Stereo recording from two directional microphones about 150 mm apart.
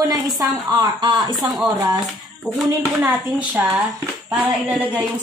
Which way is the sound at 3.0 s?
10° right (ahead or behind).